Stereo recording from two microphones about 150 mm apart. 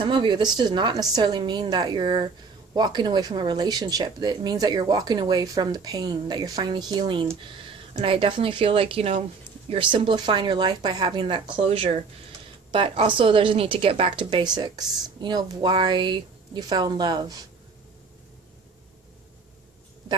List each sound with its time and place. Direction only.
0.0 s a woman's voice: 30° right (ahead or behind)